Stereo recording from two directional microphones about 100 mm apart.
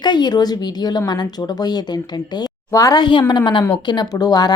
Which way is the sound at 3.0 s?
55° left (ahead or behind).